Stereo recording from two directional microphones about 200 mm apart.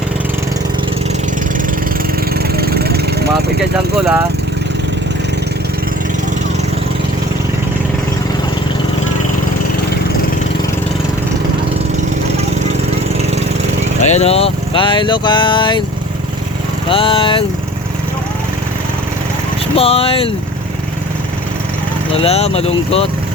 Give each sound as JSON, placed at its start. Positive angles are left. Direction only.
{"t": 2.3, "sound": "vehicle", "side_deg": -50}
{"t": 14.1, "sound": "speech", "side_deg": 30}
{"t": 16.9, "sound": "speech", "side_deg": 25}
{"t": 19.7, "sound": "speech", "side_deg": 30}
{"t": 22.2, "sound": "speech", "side_deg": 30}